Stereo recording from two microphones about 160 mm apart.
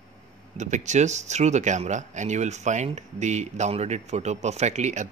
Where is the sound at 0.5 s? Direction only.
50° right (ahead or behind).